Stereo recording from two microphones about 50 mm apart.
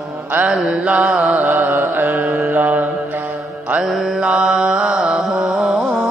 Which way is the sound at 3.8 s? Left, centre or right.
Centre.